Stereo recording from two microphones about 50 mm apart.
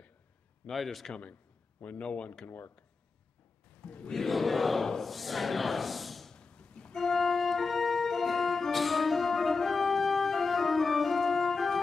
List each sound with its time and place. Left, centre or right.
0.7 s speech: centre
1.8 s speech: left
3.8 s speech: centre
4.1 s a sound: centre
6.3 s a sound: centre
7.0 s organ: centre